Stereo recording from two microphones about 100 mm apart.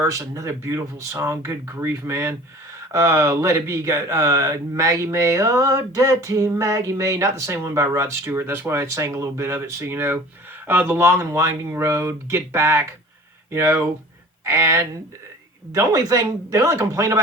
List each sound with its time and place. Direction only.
0.0 s speech: 35° right (ahead or behind)